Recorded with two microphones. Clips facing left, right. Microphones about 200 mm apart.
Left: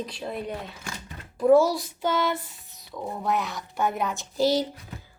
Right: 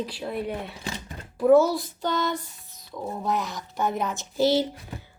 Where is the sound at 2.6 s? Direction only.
20° left (ahead or behind).